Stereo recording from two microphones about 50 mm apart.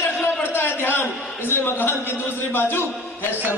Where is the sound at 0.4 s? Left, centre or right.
Left.